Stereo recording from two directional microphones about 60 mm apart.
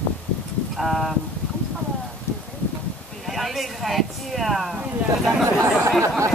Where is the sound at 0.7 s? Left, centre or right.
Centre.